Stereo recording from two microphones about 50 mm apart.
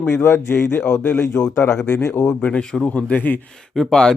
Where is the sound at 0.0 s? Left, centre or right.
Left.